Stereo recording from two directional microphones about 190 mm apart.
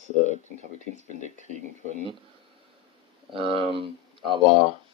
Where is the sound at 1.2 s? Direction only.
40° right (ahead or behind).